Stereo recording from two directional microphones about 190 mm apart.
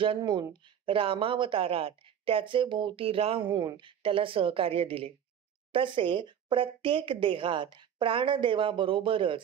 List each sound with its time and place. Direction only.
0.0 s speech: 25° right (ahead or behind)